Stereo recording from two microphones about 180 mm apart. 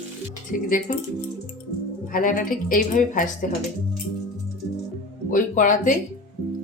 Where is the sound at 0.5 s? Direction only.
50° left (ahead or behind).